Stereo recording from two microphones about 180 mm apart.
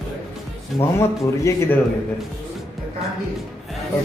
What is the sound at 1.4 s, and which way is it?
Speech, 15° left (ahead or behind).